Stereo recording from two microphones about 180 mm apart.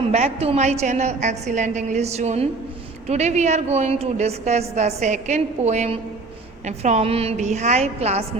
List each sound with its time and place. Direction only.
0.0 s a woman's voice: 35° right (ahead or behind)